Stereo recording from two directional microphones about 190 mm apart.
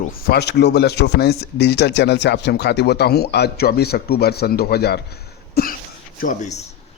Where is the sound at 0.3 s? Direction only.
60° left (ahead or behind).